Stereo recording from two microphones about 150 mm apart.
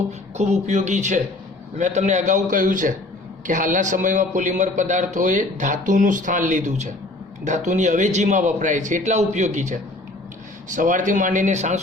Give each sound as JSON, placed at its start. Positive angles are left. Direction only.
{"t": 0.3, "sound": "a man's voice", "side_deg": -50}